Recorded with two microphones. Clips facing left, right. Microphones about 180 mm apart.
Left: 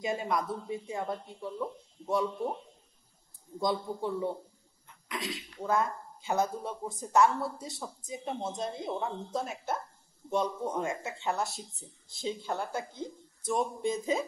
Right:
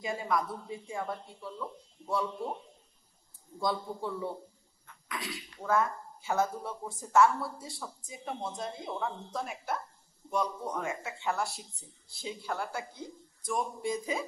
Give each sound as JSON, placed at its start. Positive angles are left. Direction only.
{"t": 0.0, "sound": "speech", "side_deg": 20}
{"t": 3.5, "sound": "speech", "side_deg": 20}